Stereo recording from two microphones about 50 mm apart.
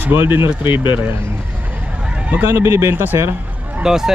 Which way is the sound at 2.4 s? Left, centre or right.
Right.